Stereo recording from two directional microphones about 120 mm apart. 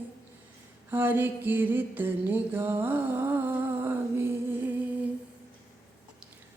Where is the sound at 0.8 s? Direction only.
15° right (ahead or behind).